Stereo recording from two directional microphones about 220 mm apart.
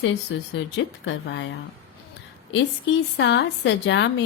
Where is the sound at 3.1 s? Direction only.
55° left (ahead or behind).